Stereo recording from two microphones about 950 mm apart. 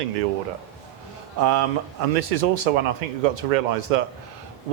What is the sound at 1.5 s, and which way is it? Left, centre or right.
Speech, right.